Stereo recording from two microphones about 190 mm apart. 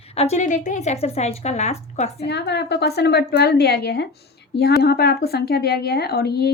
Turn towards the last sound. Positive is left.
turn(degrees=55)  # may be behind; listen again after turning